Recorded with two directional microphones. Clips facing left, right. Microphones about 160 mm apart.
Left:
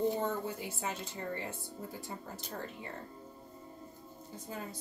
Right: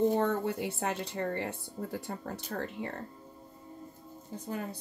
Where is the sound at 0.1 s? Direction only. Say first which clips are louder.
Right 6 dB; 60° right (ahead or behind).